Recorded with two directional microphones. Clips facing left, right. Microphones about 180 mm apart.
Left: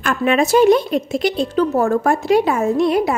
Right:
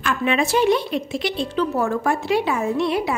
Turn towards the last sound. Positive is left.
turn(degrees=45)  # may be behind; listen again after turning